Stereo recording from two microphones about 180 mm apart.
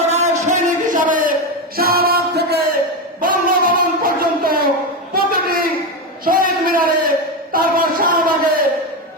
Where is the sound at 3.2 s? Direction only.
50° right (ahead or behind).